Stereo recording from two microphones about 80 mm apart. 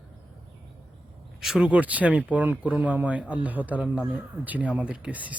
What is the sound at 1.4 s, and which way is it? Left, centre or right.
Speech, centre.